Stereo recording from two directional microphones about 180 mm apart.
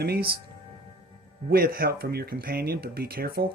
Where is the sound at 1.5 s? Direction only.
55° right (ahead or behind).